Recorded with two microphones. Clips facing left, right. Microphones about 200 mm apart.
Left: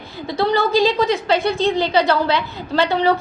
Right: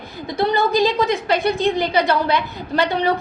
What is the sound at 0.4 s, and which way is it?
A woman's voice, 15° right (ahead or behind).